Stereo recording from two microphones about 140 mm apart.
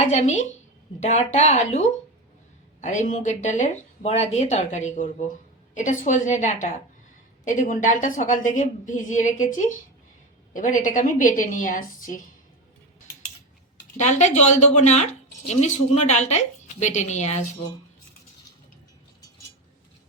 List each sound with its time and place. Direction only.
0.0 s a woman's voice: 55° left (ahead or behind)
2.8 s a woman's voice: 60° left (ahead or behind)
13.9 s speech: 55° left (ahead or behind)